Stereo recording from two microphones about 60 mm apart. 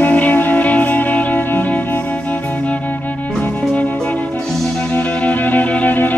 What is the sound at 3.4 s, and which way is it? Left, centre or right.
Music, left.